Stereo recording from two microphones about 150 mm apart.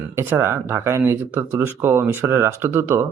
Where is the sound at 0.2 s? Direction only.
15° right (ahead or behind).